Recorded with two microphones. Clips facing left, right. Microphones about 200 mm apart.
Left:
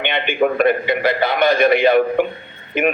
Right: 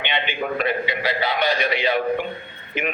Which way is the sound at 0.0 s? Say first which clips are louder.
Left 8 dB; 55° left (ahead or behind).